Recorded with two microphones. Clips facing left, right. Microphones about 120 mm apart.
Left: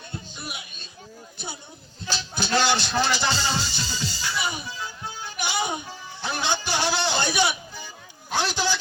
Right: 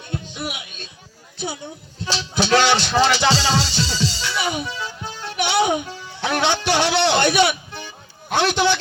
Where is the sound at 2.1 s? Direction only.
75° right (ahead or behind).